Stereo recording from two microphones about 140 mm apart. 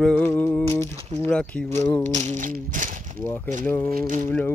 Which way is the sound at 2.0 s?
60° right (ahead or behind).